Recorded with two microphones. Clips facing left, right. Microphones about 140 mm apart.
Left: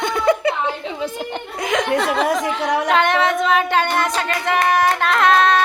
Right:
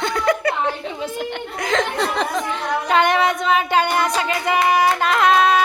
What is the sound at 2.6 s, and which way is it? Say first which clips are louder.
Speech: left 4 dB; 90° left.